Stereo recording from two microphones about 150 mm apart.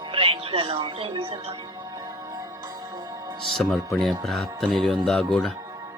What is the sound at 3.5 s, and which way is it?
Speech, centre (ahead or behind).